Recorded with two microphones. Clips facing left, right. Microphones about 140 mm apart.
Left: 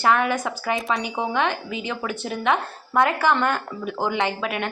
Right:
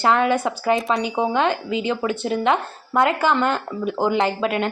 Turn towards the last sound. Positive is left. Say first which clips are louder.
# right 4 dB
turn(degrees=-25)  # may be behind; listen again after turning